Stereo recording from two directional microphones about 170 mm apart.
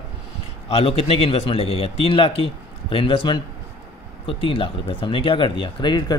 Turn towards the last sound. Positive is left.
turn(degrees=25)  # may be behind; listen again after turning